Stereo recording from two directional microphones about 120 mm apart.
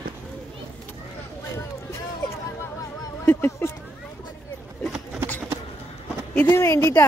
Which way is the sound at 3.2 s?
20° left (ahead or behind).